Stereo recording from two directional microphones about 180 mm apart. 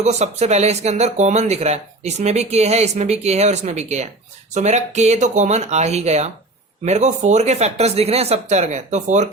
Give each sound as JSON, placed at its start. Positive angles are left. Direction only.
{"t": 0.0, "sound": "speech", "side_deg": -40}